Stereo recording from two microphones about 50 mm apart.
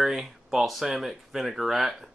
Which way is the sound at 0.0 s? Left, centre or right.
Centre.